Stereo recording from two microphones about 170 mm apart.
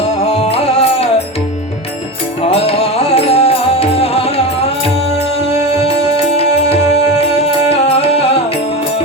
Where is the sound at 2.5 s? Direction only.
35° left (ahead or behind).